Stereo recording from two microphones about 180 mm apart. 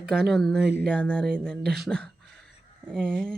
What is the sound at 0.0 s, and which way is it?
Speech, 5° left (ahead or behind).